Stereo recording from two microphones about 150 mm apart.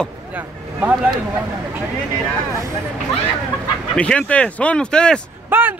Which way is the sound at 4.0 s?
10° left (ahead or behind).